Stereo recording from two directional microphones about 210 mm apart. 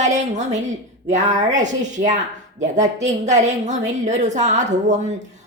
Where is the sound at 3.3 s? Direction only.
35° right (ahead or behind).